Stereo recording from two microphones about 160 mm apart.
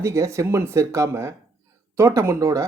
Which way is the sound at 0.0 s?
20° right (ahead or behind).